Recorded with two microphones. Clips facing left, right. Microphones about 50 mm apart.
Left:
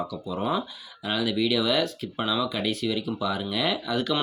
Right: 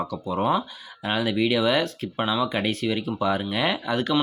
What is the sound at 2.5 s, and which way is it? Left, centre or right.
Speech, right.